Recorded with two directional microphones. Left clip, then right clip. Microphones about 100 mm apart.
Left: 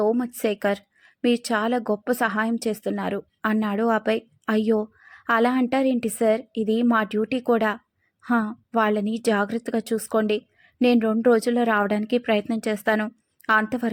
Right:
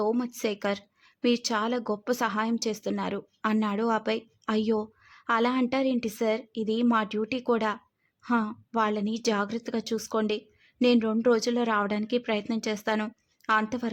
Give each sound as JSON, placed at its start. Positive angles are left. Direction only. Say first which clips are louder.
{"t": 0.2, "sound": "a woman's voice", "louder": "left 5 dB", "side_deg": 30}